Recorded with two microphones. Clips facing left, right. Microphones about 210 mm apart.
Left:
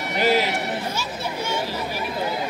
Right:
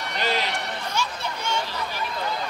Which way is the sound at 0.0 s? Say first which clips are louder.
Left 6 dB; 5° left (ahead or behind).